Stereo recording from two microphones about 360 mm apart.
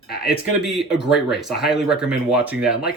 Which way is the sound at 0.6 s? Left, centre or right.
Centre.